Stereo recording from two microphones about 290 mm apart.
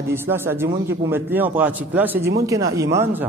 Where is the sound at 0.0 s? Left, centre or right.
Centre.